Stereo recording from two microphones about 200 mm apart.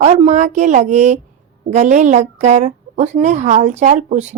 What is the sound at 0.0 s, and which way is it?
Speech, 35° right (ahead or behind).